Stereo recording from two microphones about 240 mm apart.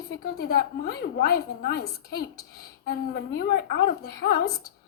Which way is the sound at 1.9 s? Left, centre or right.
Centre.